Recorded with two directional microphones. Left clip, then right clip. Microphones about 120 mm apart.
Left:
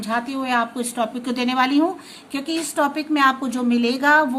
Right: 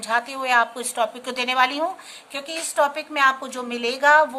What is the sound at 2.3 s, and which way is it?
A woman's voice, 15° right (ahead or behind).